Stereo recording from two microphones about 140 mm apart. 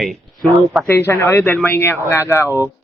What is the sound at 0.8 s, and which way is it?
Speech, 15° left (ahead or behind).